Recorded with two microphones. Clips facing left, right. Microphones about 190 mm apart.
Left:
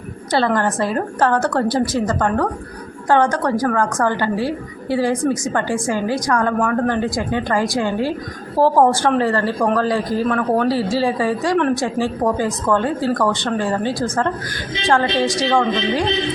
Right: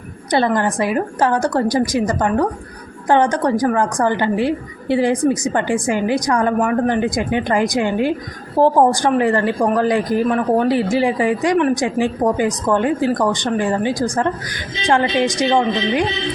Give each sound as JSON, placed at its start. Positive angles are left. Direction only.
{"t": 0.3, "sound": "a woman's voice", "side_deg": -15}